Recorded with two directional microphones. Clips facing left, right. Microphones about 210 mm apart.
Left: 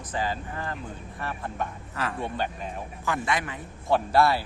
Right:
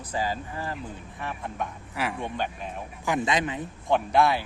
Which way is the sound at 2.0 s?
10° right (ahead or behind).